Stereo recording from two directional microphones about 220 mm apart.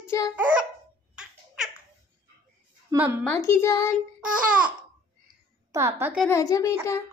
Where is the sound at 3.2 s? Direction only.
10° left (ahead or behind).